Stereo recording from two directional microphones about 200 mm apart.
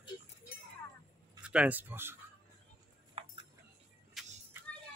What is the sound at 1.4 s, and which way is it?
Speech, 5° right (ahead or behind).